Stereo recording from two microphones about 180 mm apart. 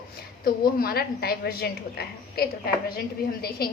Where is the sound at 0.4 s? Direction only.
55° left (ahead or behind).